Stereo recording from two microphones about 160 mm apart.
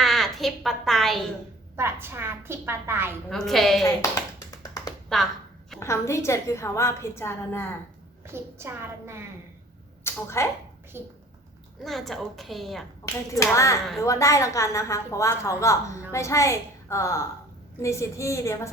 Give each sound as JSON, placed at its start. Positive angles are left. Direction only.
{"t": 0.0, "sound": "a sound", "side_deg": 0}
{"t": 1.7, "sound": "a woman's voice", "side_deg": -15}
{"t": 3.2, "sound": "a woman's voice", "side_deg": 0}
{"t": 5.0, "sound": "speech", "side_deg": 0}
{"t": 5.8, "sound": "a woman's voice", "side_deg": 15}
{"t": 8.3, "sound": "a woman's voice", "side_deg": -15}
{"t": 10.0, "sound": "speech", "side_deg": 15}
{"t": 10.9, "sound": "a woman's voice", "side_deg": -15}
{"t": 11.8, "sound": "a woman's voice", "side_deg": 0}
{"t": 13.3, "sound": "speech", "side_deg": 20}